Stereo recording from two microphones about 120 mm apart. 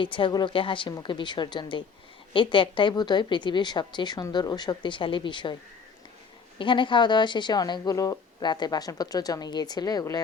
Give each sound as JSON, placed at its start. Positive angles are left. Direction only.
{"t": 0.0, "sound": "a woman's voice", "side_deg": 45}
{"t": 6.6, "sound": "speech", "side_deg": 45}